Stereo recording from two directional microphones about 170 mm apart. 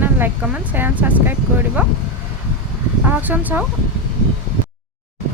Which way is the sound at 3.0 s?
10° right (ahead or behind).